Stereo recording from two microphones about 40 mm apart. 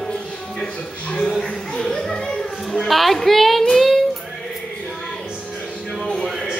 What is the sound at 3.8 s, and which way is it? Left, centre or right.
Child singing, centre.